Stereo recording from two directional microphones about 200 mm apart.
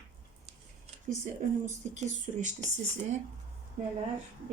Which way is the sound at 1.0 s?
40° right (ahead or behind).